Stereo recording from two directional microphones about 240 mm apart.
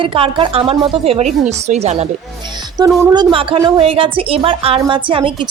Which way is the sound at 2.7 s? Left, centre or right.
Centre.